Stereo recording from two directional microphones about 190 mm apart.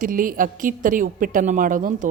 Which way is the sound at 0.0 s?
45° right (ahead or behind).